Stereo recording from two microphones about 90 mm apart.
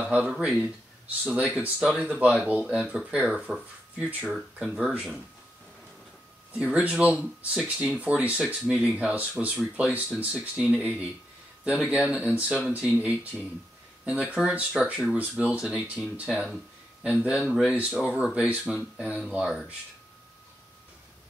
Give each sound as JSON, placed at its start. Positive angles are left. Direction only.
{"t": 0.0, "sound": "speech", "side_deg": -20}
{"t": 0.3, "sound": "speech", "side_deg": -10}
{"t": 6.5, "sound": "speech", "side_deg": -15}
{"t": 15.6, "sound": "speech", "side_deg": -5}